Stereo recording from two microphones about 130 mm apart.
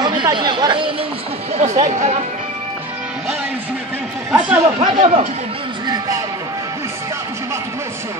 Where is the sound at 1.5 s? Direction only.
60° right (ahead or behind).